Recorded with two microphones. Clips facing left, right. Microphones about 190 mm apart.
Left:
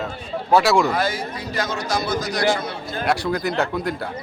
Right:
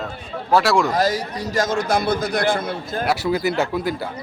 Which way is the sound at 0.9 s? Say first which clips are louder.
Right 3 dB; 40° right (ahead or behind).